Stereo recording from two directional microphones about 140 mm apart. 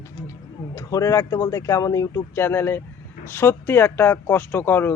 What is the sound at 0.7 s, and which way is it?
Speech, 25° left (ahead or behind).